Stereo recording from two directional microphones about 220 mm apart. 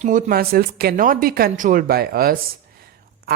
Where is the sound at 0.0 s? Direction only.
35° right (ahead or behind).